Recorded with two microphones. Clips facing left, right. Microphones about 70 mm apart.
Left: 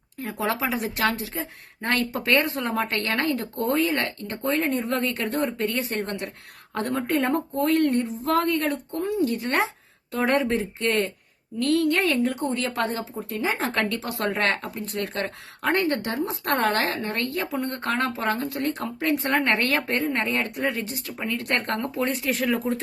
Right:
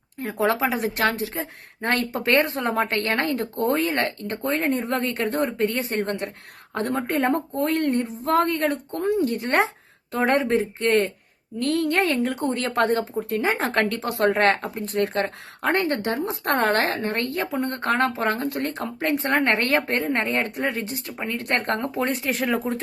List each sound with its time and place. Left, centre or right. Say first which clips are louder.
0.2 s speech: right 4 dB; right